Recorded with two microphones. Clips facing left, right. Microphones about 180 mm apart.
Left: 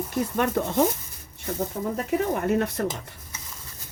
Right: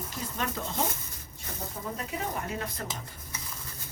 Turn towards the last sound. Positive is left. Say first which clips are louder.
# left 10 dB
turn(degrees=70)  # may be behind; listen again after turning